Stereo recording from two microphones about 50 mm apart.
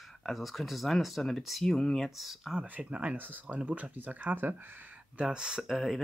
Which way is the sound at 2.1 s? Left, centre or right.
Centre.